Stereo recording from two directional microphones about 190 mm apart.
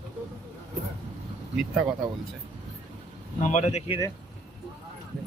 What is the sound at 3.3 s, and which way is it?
Speech, 40° left (ahead or behind).